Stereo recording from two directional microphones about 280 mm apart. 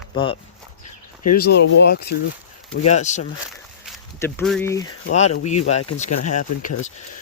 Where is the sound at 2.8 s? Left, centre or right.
Left.